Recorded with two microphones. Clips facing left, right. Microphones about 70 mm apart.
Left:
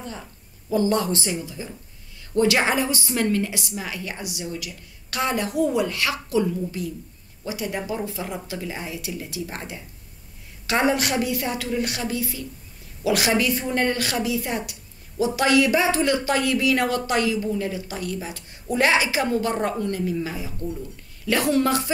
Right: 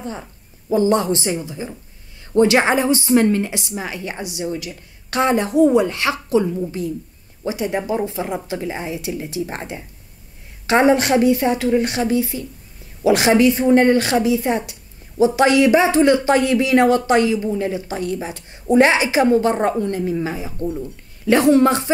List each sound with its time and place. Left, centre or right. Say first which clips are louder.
0.0 s a woman's voice: right 6 dB; right